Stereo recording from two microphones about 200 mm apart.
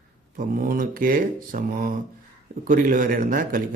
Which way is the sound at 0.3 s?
45° right (ahead or behind).